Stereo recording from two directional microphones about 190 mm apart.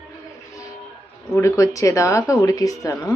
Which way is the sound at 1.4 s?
15° left (ahead or behind).